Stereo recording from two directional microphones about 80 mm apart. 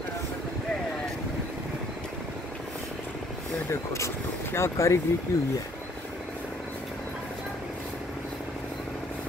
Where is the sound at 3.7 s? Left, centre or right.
Left.